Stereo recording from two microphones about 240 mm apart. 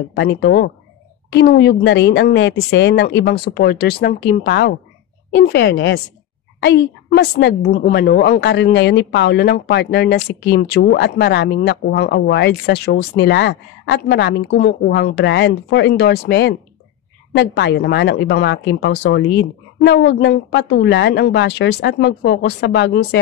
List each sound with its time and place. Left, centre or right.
0.1 s a woman's voice: left